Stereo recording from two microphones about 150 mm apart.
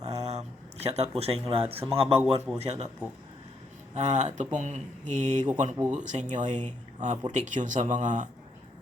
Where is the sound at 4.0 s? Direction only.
50° right (ahead or behind).